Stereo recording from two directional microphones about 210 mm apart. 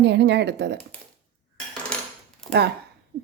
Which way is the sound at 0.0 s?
55° right (ahead or behind).